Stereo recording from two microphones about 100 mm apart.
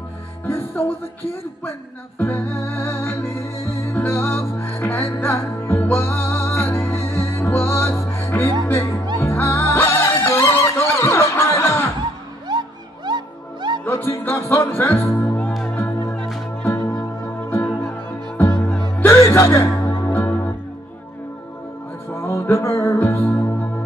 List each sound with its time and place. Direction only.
0.5 s music: 25° left (ahead or behind)
12.4 s music: 45° right (ahead or behind)
13.8 s music: 20° left (ahead or behind)
16.6 s music: 15° left (ahead or behind)
19.0 s music: 30° left (ahead or behind)
22.1 s music: 25° left (ahead or behind)